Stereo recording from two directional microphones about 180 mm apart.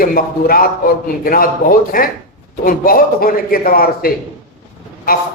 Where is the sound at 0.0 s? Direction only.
55° left (ahead or behind).